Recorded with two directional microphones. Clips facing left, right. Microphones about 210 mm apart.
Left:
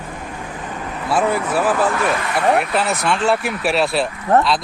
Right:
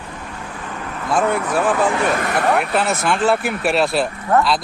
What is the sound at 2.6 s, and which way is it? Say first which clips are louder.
Speech: even; centre (ahead or behind).